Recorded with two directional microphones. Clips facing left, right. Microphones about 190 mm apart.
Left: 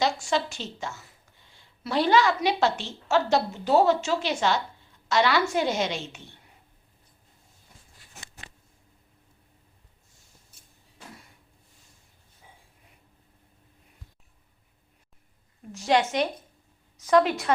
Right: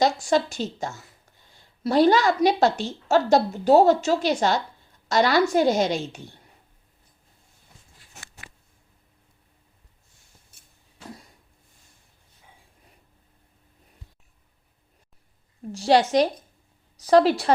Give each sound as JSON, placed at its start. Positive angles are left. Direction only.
{"t": 0.0, "sound": "a woman's voice", "side_deg": -40}
{"t": 8.4, "sound": "a sound", "side_deg": 25}
{"t": 15.7, "sound": "a woman's voice", "side_deg": -35}